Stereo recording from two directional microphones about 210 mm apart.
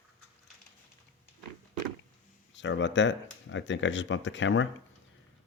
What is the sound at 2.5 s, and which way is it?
Speech, 60° left (ahead or behind).